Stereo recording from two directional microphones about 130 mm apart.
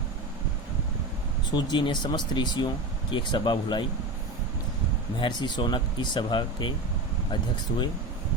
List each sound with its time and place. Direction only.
1.5 s speech: 30° left (ahead or behind)
5.2 s speech: 35° left (ahead or behind)